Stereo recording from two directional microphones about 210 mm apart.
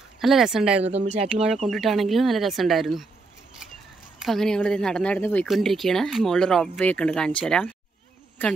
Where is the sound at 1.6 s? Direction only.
Centre (ahead or behind).